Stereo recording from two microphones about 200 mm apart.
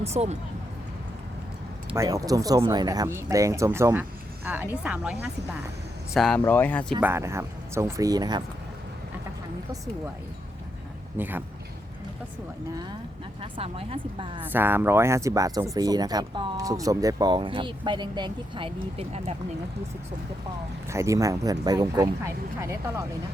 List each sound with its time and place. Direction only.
0.0 s speech: 30° right (ahead or behind)
2.0 s speech: 15° right (ahead or behind); by 6.9 s 10° left (ahead or behind)
7.0 s speech: 15° right (ahead or behind)
11.2 s speech: 10° right (ahead or behind)
13.4 s speech: 30° right (ahead or behind)
14.4 s speech: 10° right (ahead or behind); by 19.4 s 30° right (ahead or behind)
20.9 s speech: 15° right (ahead or behind)